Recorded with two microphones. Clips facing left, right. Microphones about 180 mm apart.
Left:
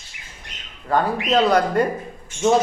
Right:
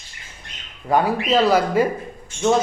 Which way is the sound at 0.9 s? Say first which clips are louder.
Right 1 dB; 10° right (ahead or behind).